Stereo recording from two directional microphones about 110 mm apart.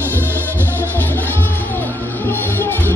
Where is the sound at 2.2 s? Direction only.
20° left (ahead or behind).